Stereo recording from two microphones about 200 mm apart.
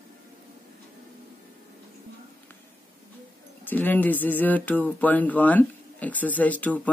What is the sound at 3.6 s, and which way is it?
Speech, 10° left (ahead or behind).